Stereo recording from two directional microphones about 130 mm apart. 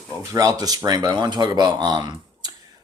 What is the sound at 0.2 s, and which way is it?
Speech, 25° right (ahead or behind).